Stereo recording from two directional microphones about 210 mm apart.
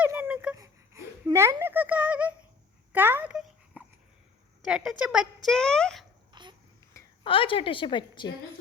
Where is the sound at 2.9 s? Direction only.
10° right (ahead or behind).